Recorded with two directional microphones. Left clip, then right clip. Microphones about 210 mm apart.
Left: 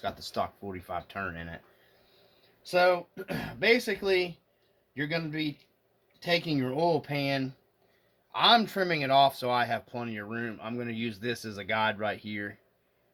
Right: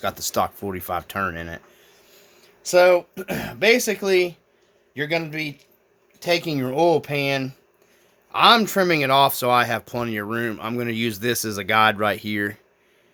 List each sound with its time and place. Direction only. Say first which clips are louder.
0.0 s speech: right 9 dB; 55° right (ahead or behind)
2.6 s speech: right 9 dB; 45° right (ahead or behind)